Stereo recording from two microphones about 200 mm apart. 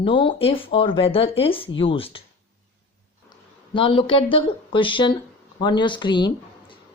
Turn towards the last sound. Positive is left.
turn(degrees=25)  # may be behind; listen again after turning